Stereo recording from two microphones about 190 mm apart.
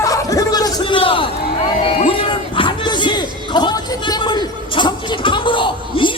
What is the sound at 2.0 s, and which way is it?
Music, 30° left (ahead or behind).